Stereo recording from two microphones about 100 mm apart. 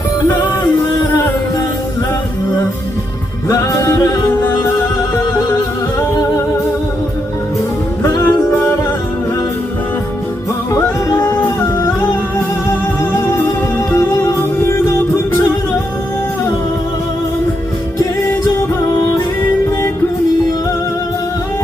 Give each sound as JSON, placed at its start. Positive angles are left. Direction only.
{"t": 3.5, "sound": "music", "side_deg": 35}
{"t": 8.0, "sound": "music", "side_deg": 30}
{"t": 10.7, "sound": "yodeling", "side_deg": 25}
{"t": 13.0, "sound": "music", "side_deg": 30}